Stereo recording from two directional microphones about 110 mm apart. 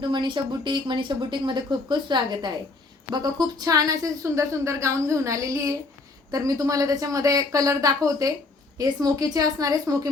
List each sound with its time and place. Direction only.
0.0 s a woman's voice: 45° right (ahead or behind)